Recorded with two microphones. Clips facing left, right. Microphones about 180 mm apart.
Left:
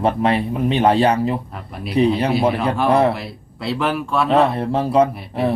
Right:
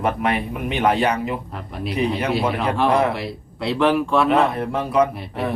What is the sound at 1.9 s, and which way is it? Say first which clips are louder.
Speech: left 5 dB; 30° left (ahead or behind).